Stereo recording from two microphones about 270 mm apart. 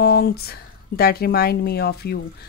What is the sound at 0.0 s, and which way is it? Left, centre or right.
Speech, left.